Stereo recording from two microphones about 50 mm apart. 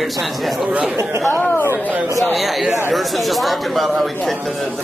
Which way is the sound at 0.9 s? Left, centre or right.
Right.